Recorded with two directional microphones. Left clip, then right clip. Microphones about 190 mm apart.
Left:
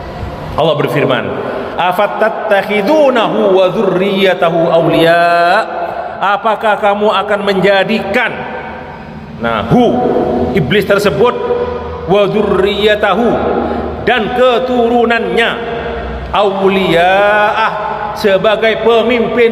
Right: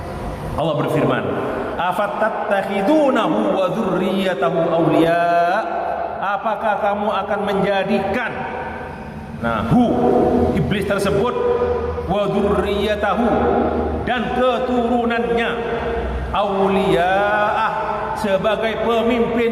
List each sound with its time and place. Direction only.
0.6 s a man's voice: 25° left (ahead or behind)
9.4 s a man's voice: 25° left (ahead or behind)